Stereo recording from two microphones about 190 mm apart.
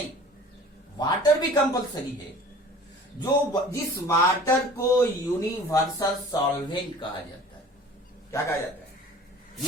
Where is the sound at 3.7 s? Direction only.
15° left (ahead or behind).